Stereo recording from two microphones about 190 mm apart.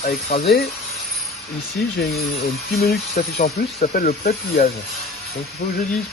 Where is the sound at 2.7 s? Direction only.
55° left (ahead or behind).